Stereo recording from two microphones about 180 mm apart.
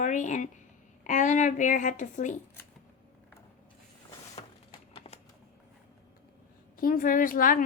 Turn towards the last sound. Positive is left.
turn(degrees=50)  # may be behind; listen again after turning